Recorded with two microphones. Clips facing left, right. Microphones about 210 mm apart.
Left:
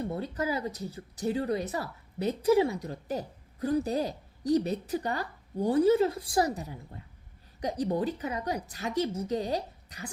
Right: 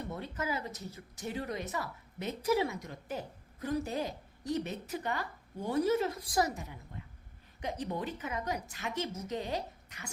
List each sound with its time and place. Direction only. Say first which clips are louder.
0.1 s speech: left 5 dB; 35° left (ahead or behind)